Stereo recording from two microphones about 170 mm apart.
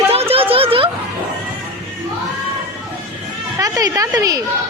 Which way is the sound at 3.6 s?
20° right (ahead or behind).